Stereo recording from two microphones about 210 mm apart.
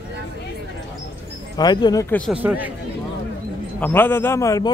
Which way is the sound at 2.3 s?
5° right (ahead or behind).